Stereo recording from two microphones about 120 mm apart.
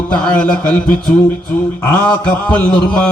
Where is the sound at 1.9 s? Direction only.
10° left (ahead or behind).